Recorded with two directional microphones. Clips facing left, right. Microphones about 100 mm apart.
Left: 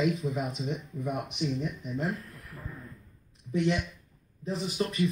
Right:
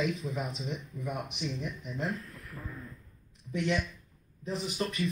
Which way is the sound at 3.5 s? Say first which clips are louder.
Left 3 dB; 25° left (ahead or behind).